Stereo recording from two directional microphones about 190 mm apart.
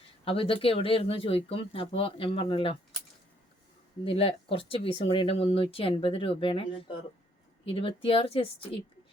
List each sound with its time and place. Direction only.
0.3 s speech: 30° left (ahead or behind)
4.0 s speech: 30° left (ahead or behind)